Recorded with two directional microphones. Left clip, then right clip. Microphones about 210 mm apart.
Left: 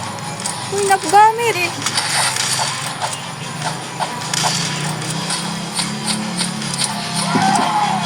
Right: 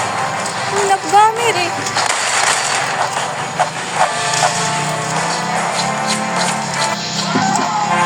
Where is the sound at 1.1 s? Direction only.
5° left (ahead or behind).